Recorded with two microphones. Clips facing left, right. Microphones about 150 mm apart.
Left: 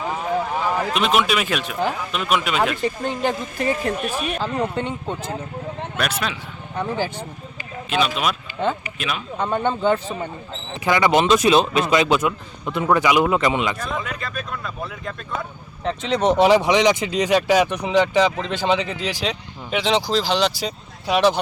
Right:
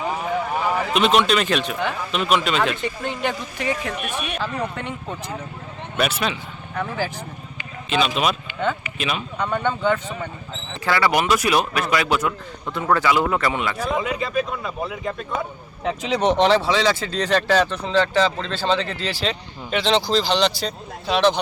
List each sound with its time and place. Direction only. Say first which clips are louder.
0.0 s a sound: left 1 dB; 5° right (ahead or behind)
2.1 s speech: right 2 dB; 5° left (ahead or behind)
2.8 s speech: left 3 dB; 40° left (ahead or behind)
4.2 s speech: left 3 dB; 25° left (ahead or behind)
6.0 s speech: right 3 dB; centre (ahead or behind)
6.7 s speech: left 2 dB; 25° left (ahead or behind)
7.9 s speech: right 1 dB; centre (ahead or behind)
9.4 s speech: left 2 dB; 25° left (ahead or behind)
10.8 s speech: left 3 dB; 20° left (ahead or behind)
13.7 s speech: right 5 dB; 10° right (ahead or behind); by 21.4 s 10° left (ahead or behind)